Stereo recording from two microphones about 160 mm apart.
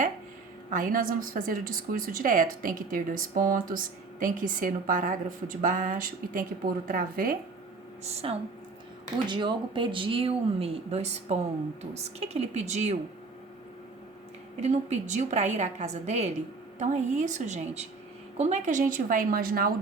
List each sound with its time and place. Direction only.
0.7 s a woman's voice: 60° right (ahead or behind)
8.0 s a woman's voice: 40° right (ahead or behind)
14.6 s a woman's voice: 45° right (ahead or behind); by 19.7 s 65° right (ahead or behind)